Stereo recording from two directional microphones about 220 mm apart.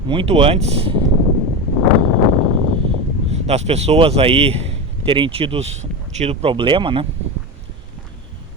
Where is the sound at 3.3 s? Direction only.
30° right (ahead or behind).